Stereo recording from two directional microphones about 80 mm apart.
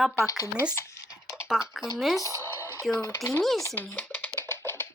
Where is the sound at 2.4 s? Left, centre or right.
Left.